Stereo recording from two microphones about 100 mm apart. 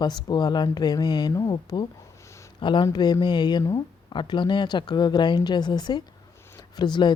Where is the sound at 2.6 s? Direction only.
55° left (ahead or behind).